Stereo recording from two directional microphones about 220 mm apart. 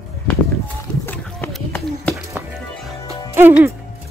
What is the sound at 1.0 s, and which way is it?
Run, 10° left (ahead or behind).